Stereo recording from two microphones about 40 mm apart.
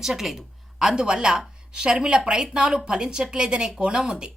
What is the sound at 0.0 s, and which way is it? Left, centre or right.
Speech, centre.